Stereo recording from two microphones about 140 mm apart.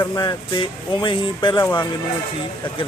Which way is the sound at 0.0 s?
30° left (ahead or behind).